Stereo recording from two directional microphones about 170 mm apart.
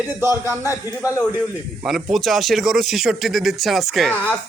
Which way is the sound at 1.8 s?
Centre (ahead or behind).